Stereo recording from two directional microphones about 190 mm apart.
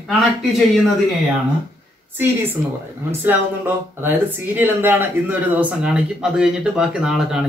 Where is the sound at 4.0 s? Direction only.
10° right (ahead or behind).